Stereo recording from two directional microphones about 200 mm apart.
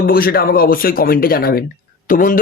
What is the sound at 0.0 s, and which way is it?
Speech, 50° left (ahead or behind).